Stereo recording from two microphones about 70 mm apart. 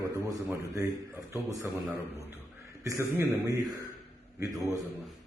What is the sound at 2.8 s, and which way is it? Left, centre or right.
Speech, right.